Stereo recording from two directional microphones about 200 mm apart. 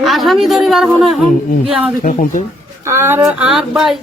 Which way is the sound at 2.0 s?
40° left (ahead or behind).